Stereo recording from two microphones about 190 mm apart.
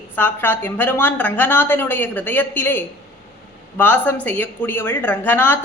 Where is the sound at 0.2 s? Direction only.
10° left (ahead or behind).